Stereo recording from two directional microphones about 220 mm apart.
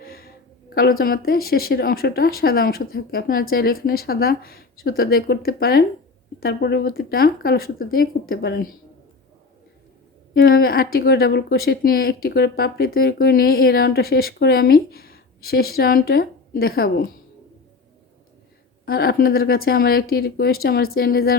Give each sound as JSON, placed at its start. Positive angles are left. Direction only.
{"t": 0.0, "sound": "a sound", "side_deg": 45}
{"t": 0.7, "sound": "speech", "side_deg": 40}
{"t": 10.3, "sound": "speech", "side_deg": 45}
{"t": 18.9, "sound": "speech", "side_deg": 45}